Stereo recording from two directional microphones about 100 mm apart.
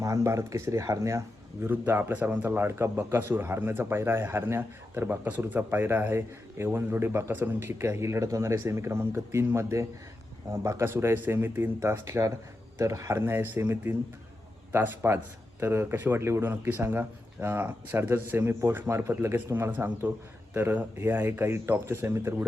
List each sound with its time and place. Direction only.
0.0 s speech: 30° right (ahead or behind)
1.6 s a man's voice: 20° right (ahead or behind)